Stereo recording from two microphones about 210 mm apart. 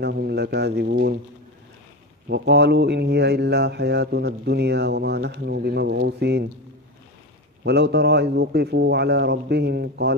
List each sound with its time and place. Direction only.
0.0 s speech: 50° right (ahead or behind)
2.2 s speech: 55° right (ahead or behind)
7.6 s speech: 50° right (ahead or behind)